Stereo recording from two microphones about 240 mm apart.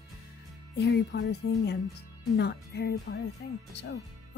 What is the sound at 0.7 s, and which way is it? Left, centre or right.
Speech, left.